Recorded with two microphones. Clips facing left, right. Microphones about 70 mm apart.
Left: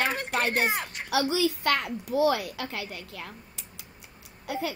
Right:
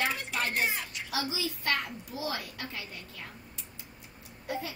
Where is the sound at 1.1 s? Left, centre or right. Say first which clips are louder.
Left 9 dB; left.